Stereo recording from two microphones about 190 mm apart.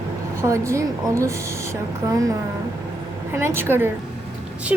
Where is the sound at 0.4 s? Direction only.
15° right (ahead or behind).